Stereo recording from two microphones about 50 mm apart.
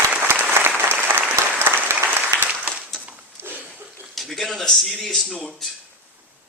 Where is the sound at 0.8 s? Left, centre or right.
Right.